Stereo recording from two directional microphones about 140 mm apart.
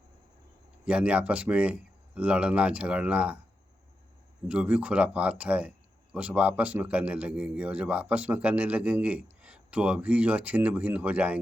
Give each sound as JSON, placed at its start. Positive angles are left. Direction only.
{"t": 0.9, "sound": "a man's voice", "side_deg": -10}
{"t": 4.4, "sound": "a man's voice", "side_deg": -10}